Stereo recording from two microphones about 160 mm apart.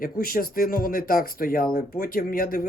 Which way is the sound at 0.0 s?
65° left (ahead or behind).